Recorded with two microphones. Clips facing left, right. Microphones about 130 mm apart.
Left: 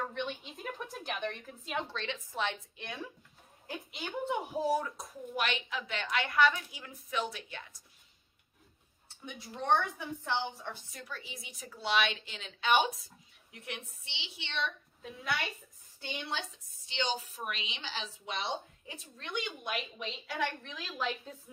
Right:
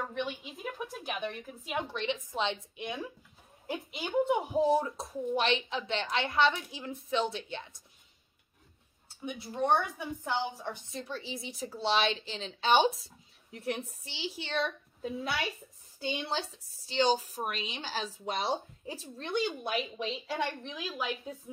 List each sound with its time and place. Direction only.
0.1 s a woman's voice: 5° right (ahead or behind); by 3.0 s 20° right (ahead or behind)
4.3 s speech: 25° right (ahead or behind)
9.2 s a woman's voice: 10° right (ahead or behind)
10.9 s a woman's voice: 25° right (ahead or behind)
16.0 s a woman's voice: 30° right (ahead or behind)
20.7 s a woman's voice: 10° right (ahead or behind)